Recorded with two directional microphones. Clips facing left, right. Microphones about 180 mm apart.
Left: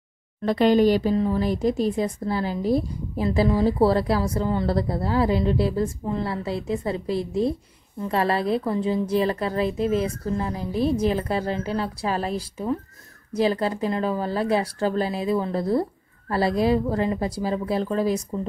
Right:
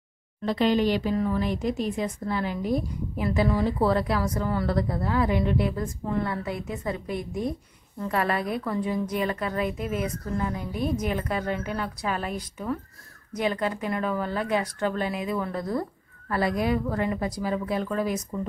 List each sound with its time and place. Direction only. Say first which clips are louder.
0.4 s speech: left 5 dB; 50° left (ahead or behind)
1.1 s a woman's voice: left 3 dB; 30° left (ahead or behind)